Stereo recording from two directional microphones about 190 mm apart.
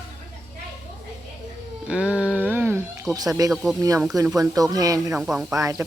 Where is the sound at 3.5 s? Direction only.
Centre (ahead or behind).